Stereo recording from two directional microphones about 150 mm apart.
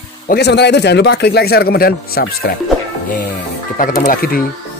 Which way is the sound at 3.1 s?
65° left (ahead or behind).